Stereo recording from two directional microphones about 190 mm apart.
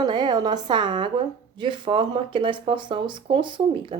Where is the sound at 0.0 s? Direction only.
25° right (ahead or behind).